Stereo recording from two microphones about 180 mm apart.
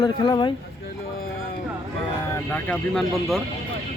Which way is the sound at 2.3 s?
15° left (ahead or behind).